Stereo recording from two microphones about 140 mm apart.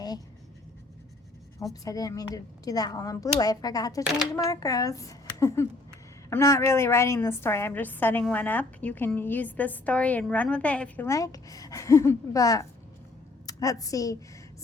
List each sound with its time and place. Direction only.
1.7 s a woman's voice: 25° left (ahead or behind)
4.1 s speech: centre (ahead or behind)
4.4 s a woman's voice: 25° left (ahead or behind)